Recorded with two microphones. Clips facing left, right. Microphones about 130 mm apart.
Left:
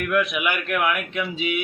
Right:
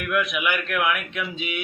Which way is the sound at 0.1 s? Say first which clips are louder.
Even; centre (ahead or behind).